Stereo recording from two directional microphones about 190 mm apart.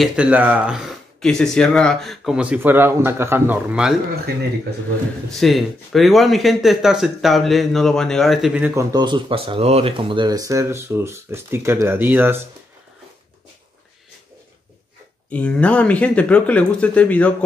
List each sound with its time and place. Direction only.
0.0 s speech: 5° right (ahead or behind)
5.3 s speech: centre (ahead or behind)
8.9 s speech: 25° right (ahead or behind)
15.3 s speech: 5° left (ahead or behind)